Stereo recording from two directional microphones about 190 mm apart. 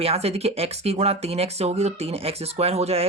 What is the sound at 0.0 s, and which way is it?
Speech, 30° right (ahead or behind).